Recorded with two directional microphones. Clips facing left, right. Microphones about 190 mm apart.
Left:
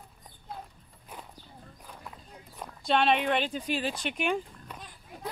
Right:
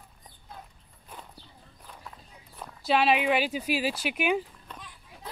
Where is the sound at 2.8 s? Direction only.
5° right (ahead or behind).